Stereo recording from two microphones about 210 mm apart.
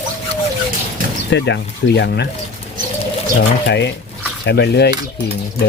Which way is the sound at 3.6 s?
55° left (ahead or behind).